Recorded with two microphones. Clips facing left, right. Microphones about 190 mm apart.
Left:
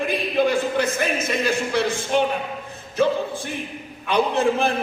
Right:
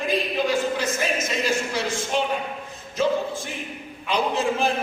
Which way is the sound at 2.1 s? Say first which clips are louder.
Left 5 dB; 55° left (ahead or behind).